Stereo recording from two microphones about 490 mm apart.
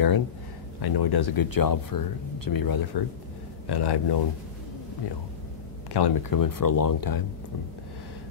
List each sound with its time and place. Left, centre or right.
0.7 s speech: left
5.9 s speech: left